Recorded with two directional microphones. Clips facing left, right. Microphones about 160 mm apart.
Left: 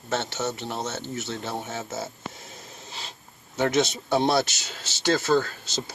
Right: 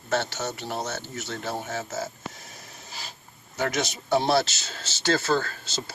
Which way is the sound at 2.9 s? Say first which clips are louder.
Left 1 dB; 25° left (ahead or behind).